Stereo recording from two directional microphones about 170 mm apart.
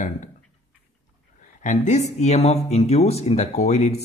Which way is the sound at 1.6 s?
45° left (ahead or behind).